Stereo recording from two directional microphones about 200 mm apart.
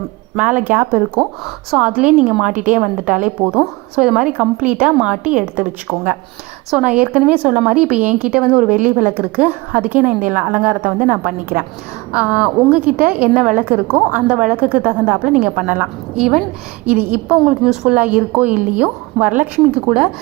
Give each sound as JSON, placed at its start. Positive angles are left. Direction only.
{"t": 0.6, "sound": "a woman's voice", "side_deg": -10}
{"t": 2.5, "sound": "a woman's voice", "side_deg": -40}
{"t": 3.1, "sound": "a woman's voice", "side_deg": -5}
{"t": 8.7, "sound": "a woman's voice", "side_deg": -40}
{"t": 9.4, "sound": "a woman's voice", "side_deg": -5}